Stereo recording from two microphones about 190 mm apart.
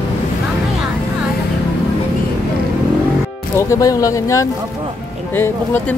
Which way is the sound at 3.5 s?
15° left (ahead or behind).